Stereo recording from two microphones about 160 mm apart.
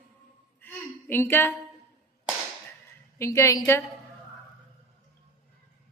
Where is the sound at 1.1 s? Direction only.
15° left (ahead or behind).